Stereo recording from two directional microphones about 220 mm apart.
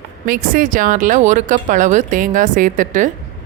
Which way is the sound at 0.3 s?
40° right (ahead or behind).